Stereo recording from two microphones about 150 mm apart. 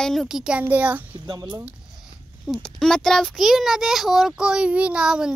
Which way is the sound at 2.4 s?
Centre (ahead or behind).